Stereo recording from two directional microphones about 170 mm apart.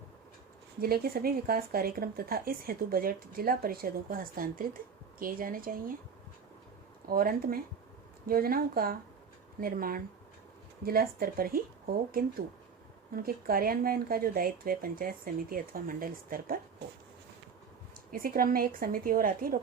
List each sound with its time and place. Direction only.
0.8 s speech: 60° right (ahead or behind)
7.1 s speech: 60° right (ahead or behind)
13.1 s speech: 60° right (ahead or behind)
18.1 s speech: 60° right (ahead or behind)